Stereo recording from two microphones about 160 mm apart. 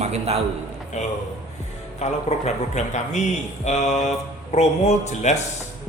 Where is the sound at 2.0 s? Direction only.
45° left (ahead or behind).